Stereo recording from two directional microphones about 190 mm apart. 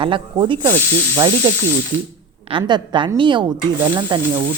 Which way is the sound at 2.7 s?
25° right (ahead or behind).